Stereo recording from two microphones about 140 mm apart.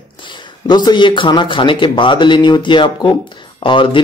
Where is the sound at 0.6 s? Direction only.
30° left (ahead or behind).